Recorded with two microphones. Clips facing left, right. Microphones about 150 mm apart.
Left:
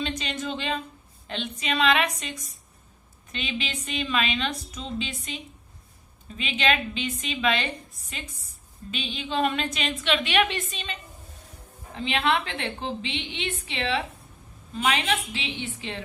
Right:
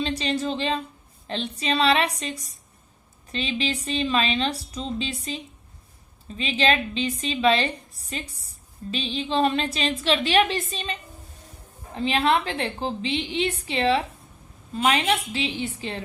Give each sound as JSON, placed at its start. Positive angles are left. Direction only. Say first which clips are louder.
{"t": 0.0, "sound": "a woman's voice", "louder": "right 5 dB", "side_deg": -35}
{"t": 11.9, "sound": "a woman's voice", "louder": "right 3 dB", "side_deg": -35}